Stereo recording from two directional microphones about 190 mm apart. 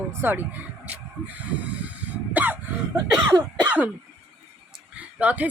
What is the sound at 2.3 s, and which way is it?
Cough, 10° right (ahead or behind).